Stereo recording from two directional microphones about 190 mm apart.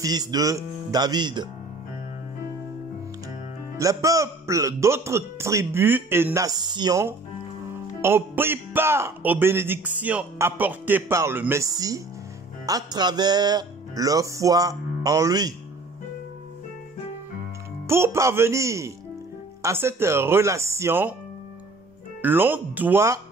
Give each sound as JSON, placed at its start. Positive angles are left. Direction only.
{"t": 0.0, "sound": "speech", "side_deg": -20}
{"t": 3.7, "sound": "speech", "side_deg": -15}
{"t": 17.8, "sound": "speech", "side_deg": -15}
{"t": 22.2, "sound": "speech", "side_deg": -10}